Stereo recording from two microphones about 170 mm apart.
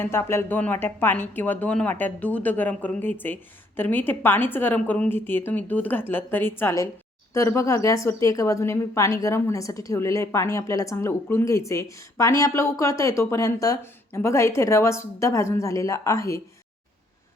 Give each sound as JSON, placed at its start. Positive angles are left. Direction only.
{"t": 0.0, "sound": "speech", "side_deg": 15}